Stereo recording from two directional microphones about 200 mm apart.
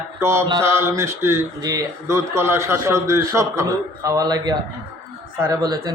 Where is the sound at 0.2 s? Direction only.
15° right (ahead or behind).